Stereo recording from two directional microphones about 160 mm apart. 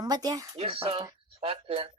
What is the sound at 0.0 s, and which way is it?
Speech, 25° right (ahead or behind).